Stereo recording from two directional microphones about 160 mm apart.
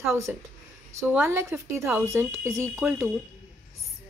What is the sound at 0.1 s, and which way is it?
Speech, 15° right (ahead or behind).